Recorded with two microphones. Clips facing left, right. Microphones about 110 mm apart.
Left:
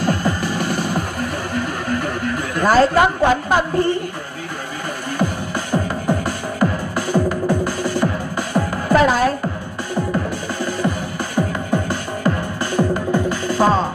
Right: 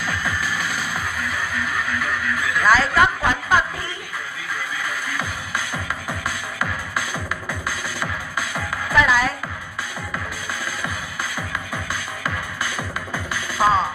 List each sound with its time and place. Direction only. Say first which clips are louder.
0.0 s music: left 6 dB; 50° left (ahead or behind)
5.2 s music: left 7 dB; 45° left (ahead or behind)
11.3 s music: left 9 dB; 45° left (ahead or behind)